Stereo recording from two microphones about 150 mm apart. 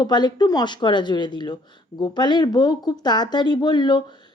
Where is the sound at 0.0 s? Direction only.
30° left (ahead or behind).